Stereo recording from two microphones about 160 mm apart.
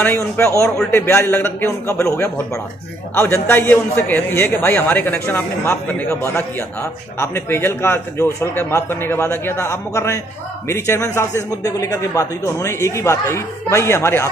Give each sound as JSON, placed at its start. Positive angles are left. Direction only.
{"t": 0.0, "sound": "a man's voice", "side_deg": 10}